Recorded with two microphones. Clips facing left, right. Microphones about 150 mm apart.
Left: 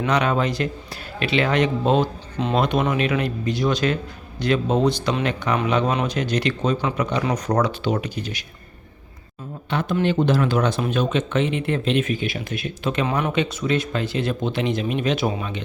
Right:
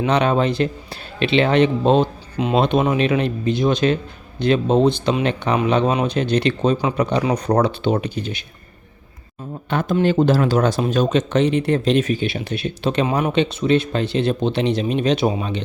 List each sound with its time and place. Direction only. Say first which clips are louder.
0.0 s speech: right 3 dB; 30° right (ahead or behind)
9.9 s speech: right 4 dB; 40° right (ahead or behind)